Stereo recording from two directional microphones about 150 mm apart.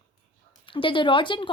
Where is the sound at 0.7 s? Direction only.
35° left (ahead or behind).